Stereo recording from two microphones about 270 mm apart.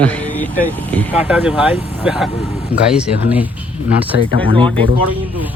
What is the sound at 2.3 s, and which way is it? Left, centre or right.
Speech, left.